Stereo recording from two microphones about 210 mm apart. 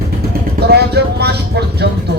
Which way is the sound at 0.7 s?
50° right (ahead or behind).